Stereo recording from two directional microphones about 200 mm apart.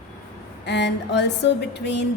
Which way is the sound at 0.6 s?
60° left (ahead or behind).